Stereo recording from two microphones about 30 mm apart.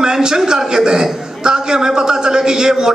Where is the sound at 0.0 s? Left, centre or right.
Right.